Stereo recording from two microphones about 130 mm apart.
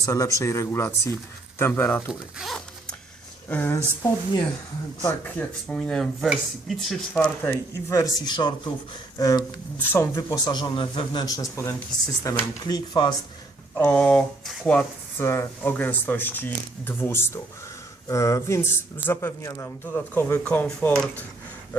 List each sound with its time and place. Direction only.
0.0 s speech: 25° left (ahead or behind)
2.4 s zipper: 5° right (ahead or behind)
3.5 s speech: 15° left (ahead or behind); by 11.4 s 35° left (ahead or behind)
11.5 s speech: 20° left (ahead or behind)
13.7 s speech: 10° left (ahead or behind)
15.2 s speech: 20° left (ahead or behind)